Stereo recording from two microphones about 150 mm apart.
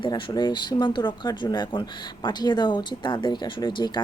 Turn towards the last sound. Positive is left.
turn(degrees=30)  # may be behind; listen again after turning